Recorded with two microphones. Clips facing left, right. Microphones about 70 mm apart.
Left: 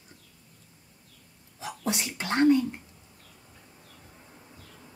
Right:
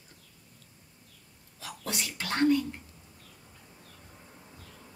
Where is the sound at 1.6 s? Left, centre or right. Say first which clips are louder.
Left 5 dB; left.